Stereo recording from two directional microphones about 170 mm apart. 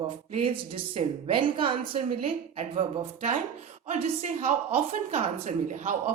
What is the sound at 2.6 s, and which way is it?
A woman's voice, 45° right (ahead or behind).